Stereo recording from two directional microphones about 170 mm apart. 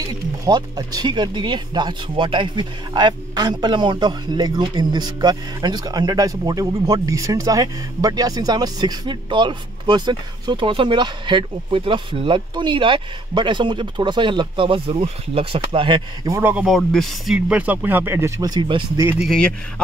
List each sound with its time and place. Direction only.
0.5 s speech: 25° right (ahead or behind)
16.5 s speech: centre (ahead or behind); by 19.0 s 25° right (ahead or behind)
19.0 s speech: 5° right (ahead or behind)